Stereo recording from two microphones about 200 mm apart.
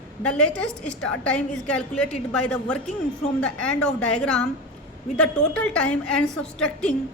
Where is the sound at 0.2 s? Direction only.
5° left (ahead or behind).